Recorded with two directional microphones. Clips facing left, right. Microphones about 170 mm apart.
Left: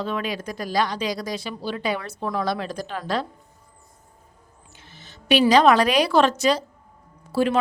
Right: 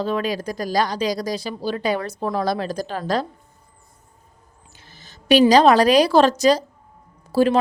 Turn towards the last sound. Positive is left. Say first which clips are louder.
# right 4 dB
turn(degrees=-35)  # may be behind; listen again after turning